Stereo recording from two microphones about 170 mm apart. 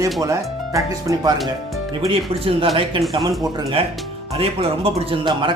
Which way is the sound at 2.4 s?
35° right (ahead or behind).